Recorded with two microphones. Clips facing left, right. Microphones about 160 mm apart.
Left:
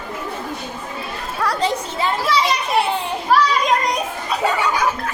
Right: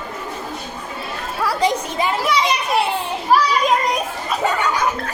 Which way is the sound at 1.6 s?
15° right (ahead or behind).